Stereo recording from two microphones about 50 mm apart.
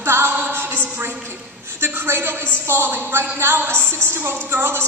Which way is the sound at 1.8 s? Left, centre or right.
Right.